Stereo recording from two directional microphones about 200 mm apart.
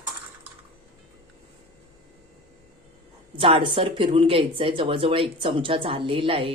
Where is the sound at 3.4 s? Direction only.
25° right (ahead or behind).